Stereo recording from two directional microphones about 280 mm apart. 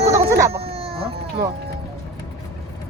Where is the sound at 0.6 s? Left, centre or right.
Right.